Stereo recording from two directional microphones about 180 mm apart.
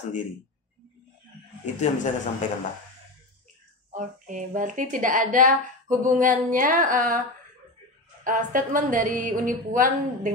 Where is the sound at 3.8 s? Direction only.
45° right (ahead or behind).